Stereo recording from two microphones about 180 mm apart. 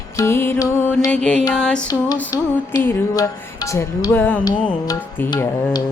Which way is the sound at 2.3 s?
20° left (ahead or behind).